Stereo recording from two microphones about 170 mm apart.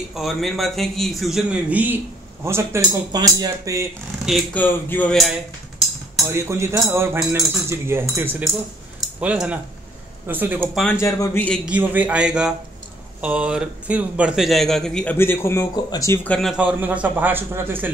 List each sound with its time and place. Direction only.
0.1 s a man's voice: centre (ahead or behind); by 3.9 s 20° right (ahead or behind)
4.6 s a man's voice: 10° left (ahead or behind)
6.2 s speech: 15° right (ahead or behind)
10.7 s a man's voice: centre (ahead or behind)
11.0 s a man's voice: 15° left (ahead or behind)
11.6 s a man's voice: 10° right (ahead or behind); by 16.2 s 20° left (ahead or behind)
16.3 s speech: centre (ahead or behind)